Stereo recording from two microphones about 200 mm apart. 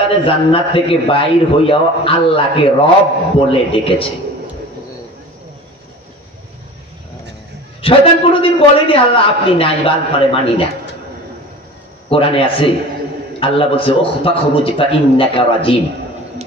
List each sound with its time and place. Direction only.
0.1 s a man's voice: 25° left (ahead or behind)
7.8 s a man's voice: 25° left (ahead or behind)
12.1 s a man's voice: 25° left (ahead or behind)